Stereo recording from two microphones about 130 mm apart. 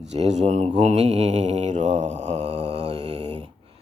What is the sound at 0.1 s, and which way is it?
Mantra, 60° right (ahead or behind).